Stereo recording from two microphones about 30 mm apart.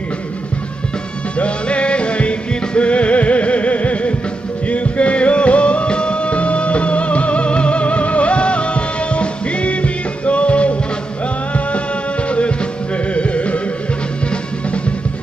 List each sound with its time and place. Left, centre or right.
1.4 s music: left